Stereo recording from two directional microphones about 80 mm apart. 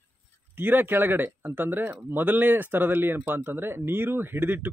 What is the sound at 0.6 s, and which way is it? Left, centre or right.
Speech, right.